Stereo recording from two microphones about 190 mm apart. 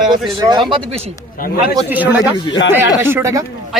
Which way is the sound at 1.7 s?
10° right (ahead or behind).